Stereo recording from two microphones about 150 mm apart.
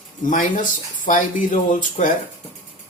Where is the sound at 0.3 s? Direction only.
60° left (ahead or behind).